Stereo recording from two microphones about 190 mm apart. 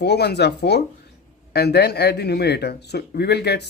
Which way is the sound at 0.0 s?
60° left (ahead or behind).